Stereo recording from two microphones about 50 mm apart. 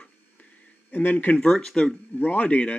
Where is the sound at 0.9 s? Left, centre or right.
Left.